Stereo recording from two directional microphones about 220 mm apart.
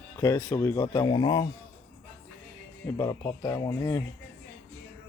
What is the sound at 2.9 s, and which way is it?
Speech, 15° left (ahead or behind).